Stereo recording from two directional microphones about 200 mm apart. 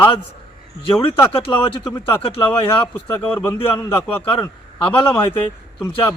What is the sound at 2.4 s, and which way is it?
Speech, 10° left (ahead or behind).